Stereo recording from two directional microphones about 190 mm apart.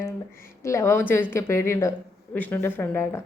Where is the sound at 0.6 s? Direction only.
15° left (ahead or behind).